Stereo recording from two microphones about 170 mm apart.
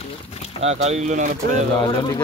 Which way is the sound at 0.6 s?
40° right (ahead or behind).